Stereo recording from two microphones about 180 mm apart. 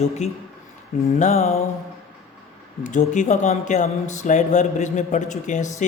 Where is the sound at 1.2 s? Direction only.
40° left (ahead or behind).